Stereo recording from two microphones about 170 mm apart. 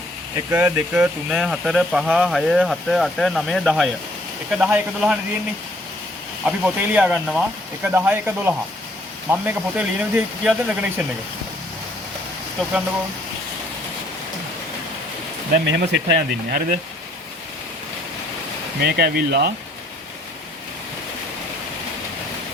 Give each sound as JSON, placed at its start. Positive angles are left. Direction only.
{"t": 0.5, "sound": "speech", "side_deg": -10}
{"t": 6.4, "sound": "speech", "side_deg": -10}
{"t": 15.6, "sound": "speech", "side_deg": -90}
{"t": 18.8, "sound": "speech", "side_deg": -75}